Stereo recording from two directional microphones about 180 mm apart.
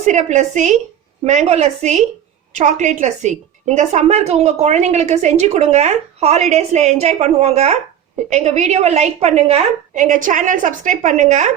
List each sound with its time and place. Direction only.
0.0 s a woman's voice: 40° right (ahead or behind)